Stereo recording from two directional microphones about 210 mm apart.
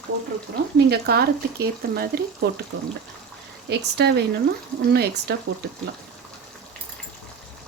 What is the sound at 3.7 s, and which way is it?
Speech, 50° right (ahead or behind).